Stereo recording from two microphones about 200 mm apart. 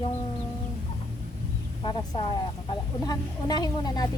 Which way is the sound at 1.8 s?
20° left (ahead or behind).